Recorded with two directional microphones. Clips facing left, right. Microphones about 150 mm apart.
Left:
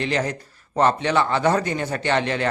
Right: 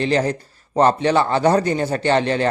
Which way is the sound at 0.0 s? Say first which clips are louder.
Right 5 dB; 35° right (ahead or behind).